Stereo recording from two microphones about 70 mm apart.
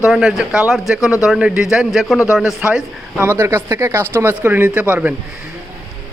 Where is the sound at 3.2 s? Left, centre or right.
Right.